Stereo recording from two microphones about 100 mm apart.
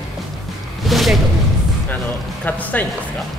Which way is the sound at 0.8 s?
Centre (ahead or behind).